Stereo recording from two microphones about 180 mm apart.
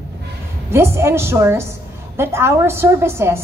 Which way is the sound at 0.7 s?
15° right (ahead or behind).